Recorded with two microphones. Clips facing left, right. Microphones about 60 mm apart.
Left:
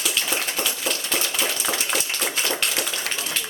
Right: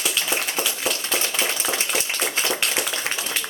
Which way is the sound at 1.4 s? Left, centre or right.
Right.